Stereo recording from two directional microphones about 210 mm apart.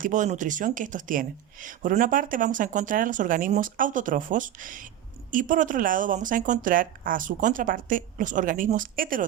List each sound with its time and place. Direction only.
0.0 s speech: 35° right (ahead or behind)